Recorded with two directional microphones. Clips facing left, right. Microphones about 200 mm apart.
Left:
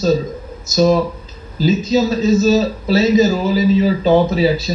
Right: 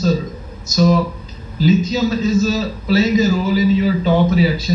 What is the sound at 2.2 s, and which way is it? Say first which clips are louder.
Speech: left 4 dB; 25° left (ahead or behind).